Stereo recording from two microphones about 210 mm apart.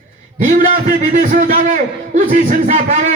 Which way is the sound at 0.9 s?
40° right (ahead or behind).